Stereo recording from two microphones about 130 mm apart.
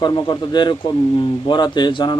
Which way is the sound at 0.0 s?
35° left (ahead or behind).